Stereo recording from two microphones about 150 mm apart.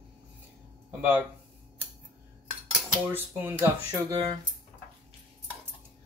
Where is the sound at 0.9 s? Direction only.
15° right (ahead or behind).